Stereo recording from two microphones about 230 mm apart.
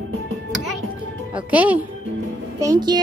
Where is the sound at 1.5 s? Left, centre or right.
Centre.